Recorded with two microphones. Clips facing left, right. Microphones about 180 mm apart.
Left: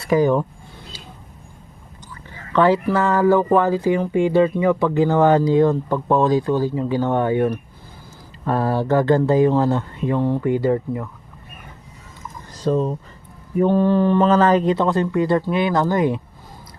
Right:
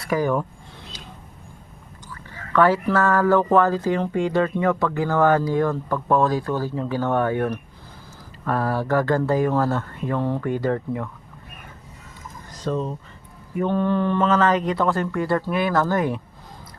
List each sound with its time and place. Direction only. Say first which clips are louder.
0.0 s speech: left 5 dB; 25° left (ahead or behind)
2.5 s speech: left 2 dB; 20° left (ahead or behind)
8.4 s speech: left 3 dB; 25° left (ahead or behind); by 11.1 s 5° left (ahead or behind)
12.5 s speech: left 6 dB; 35° left (ahead or behind); by 16.2 s 15° left (ahead or behind)